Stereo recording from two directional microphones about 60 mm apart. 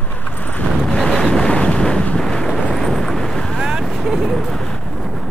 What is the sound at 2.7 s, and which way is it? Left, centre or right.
Wind noise, centre.